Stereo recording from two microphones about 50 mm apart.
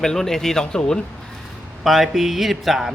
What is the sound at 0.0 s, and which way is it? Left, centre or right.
Speech, centre.